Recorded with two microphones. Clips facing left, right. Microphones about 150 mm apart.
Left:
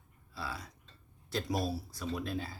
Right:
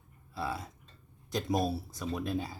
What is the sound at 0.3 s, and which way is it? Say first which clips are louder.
Speech: right 6 dB; 25° right (ahead or behind).